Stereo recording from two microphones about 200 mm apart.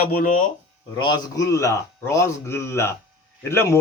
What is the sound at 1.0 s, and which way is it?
Speech, 20° left (ahead or behind).